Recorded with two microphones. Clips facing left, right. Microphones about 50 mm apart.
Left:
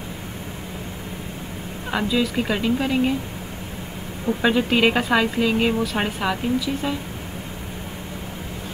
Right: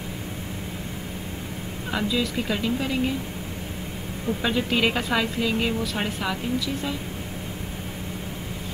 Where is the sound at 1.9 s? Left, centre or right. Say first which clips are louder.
Left 4 dB; centre.